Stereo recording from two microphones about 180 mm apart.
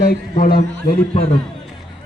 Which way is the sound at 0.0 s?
55° left (ahead or behind).